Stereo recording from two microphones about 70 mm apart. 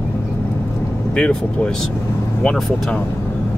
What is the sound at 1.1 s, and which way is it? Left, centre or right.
Speech, centre.